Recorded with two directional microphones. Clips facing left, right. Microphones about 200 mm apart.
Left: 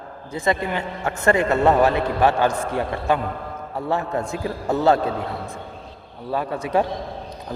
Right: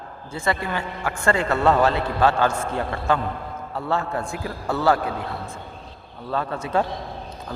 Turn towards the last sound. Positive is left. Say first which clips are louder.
# left 2 dB
turn(degrees=15)  # may be behind; listen again after turning